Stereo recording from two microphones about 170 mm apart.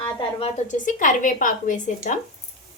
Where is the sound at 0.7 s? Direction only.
50° left (ahead or behind).